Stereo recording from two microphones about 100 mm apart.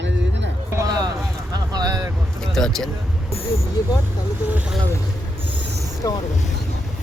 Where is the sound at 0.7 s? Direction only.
35° right (ahead or behind).